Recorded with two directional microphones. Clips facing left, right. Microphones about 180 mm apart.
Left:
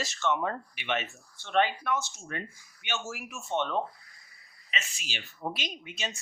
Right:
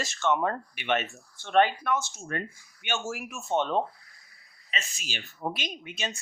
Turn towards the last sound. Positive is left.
turn(degrees=-55)  # may be behind; listen again after turning